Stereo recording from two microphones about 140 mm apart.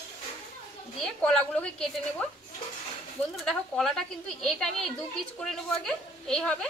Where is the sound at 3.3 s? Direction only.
5° left (ahead or behind).